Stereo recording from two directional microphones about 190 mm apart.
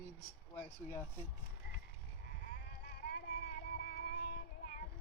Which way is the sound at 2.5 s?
55° left (ahead or behind).